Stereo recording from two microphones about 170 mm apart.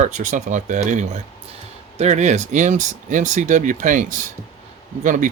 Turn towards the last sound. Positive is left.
turn(degrees=-50)  # may be behind; listen again after turning